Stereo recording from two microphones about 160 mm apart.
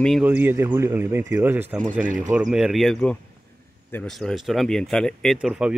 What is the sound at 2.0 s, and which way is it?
Speech, 55° right (ahead or behind).